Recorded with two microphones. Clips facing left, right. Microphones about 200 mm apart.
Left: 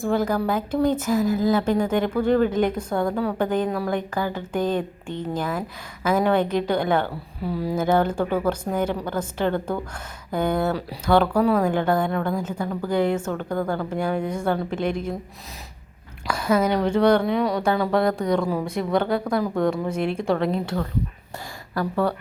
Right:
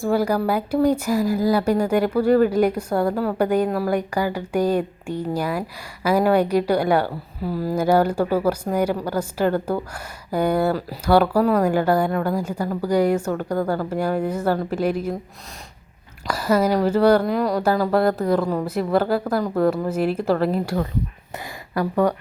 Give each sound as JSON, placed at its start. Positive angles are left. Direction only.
{"t": 0.0, "sound": "a woman's voice", "side_deg": -10}
{"t": 16.3, "sound": "a woman's voice", "side_deg": -5}